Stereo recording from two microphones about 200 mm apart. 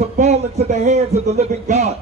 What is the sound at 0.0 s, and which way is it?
A man's voice, 35° right (ahead or behind).